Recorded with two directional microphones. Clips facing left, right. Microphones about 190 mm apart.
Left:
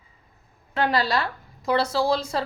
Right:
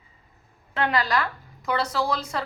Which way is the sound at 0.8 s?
35° left (ahead or behind).